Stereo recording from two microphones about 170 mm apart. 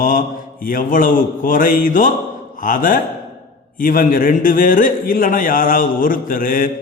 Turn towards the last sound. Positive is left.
turn(degrees=55)  # may be behind; listen again after turning